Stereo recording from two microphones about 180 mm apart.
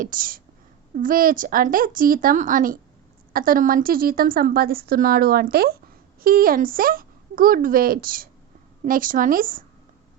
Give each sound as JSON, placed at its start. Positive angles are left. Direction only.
{"t": 0.0, "sound": "a woman's voice", "side_deg": -50}